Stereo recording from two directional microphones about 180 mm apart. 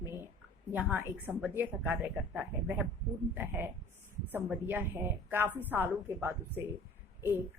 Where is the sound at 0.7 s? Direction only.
10° right (ahead or behind).